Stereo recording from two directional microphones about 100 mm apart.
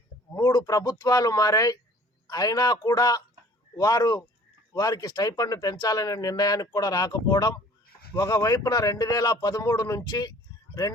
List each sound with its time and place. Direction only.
0.3 s speech: 40° left (ahead or behind)